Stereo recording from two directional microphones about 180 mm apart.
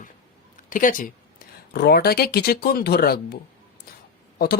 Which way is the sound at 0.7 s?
50° left (ahead or behind).